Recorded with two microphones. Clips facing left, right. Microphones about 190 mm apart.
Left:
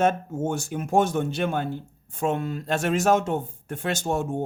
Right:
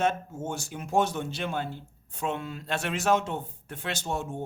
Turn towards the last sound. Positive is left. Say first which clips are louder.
# left 6 dB
turn(degrees=50)  # may be behind; listen again after turning